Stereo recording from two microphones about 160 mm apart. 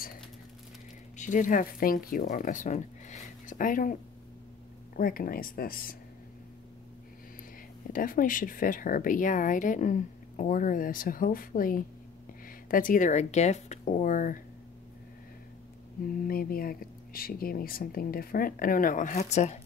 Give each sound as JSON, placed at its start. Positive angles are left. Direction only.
{"t": 1.1, "sound": "speech", "side_deg": 50}
{"t": 7.9, "sound": "speech", "side_deg": 60}
{"t": 16.3, "sound": "speech", "side_deg": 65}
{"t": 19.3, "sound": "speech", "side_deg": 45}